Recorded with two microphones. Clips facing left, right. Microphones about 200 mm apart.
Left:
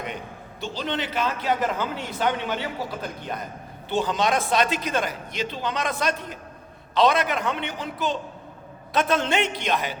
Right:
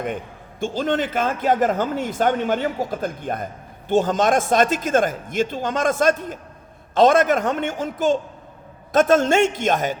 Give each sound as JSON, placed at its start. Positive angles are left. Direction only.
{"t": 0.6, "sound": "speech", "side_deg": -50}